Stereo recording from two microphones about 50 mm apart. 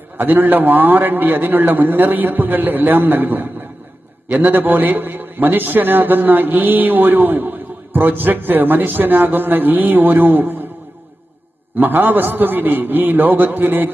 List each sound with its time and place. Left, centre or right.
0.2 s a man's voice: right
11.8 s a man's voice: right